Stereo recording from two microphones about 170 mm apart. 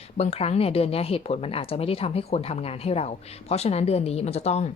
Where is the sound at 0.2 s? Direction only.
40° left (ahead or behind).